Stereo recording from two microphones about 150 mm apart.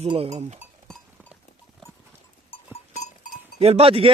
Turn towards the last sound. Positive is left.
turn(degrees=-40)  # may be behind; listen again after turning